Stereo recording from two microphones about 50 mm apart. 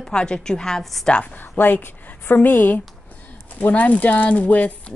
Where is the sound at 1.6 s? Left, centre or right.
Left.